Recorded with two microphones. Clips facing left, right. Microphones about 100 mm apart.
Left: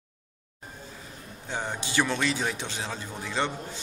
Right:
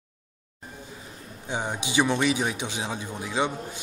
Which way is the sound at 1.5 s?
15° right (ahead or behind).